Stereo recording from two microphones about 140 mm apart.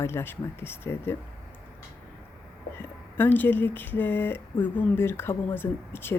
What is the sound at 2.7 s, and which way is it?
Speech, 15° left (ahead or behind).